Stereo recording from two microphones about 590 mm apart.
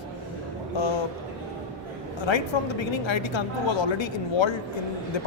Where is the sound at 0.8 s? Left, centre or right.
Left.